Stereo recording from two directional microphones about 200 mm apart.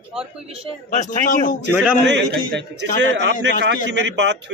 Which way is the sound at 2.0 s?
60° right (ahead or behind).